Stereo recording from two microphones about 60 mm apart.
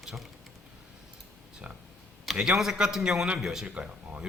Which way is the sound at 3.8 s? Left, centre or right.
Right.